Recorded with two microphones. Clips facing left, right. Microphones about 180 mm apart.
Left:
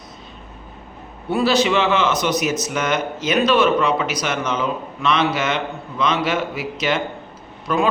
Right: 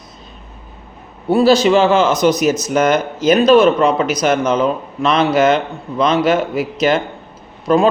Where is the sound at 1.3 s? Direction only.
40° right (ahead or behind).